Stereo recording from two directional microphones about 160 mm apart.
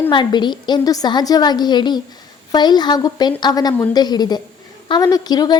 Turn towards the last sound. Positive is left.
turn(degrees=25)  # may be behind; listen again after turning